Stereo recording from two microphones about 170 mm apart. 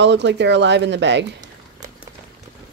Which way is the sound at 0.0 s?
90° right.